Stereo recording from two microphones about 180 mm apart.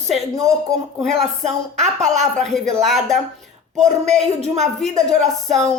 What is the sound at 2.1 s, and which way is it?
Speech, 40° right (ahead or behind).